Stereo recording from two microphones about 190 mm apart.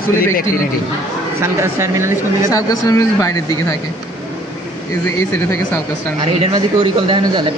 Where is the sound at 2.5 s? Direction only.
15° left (ahead or behind).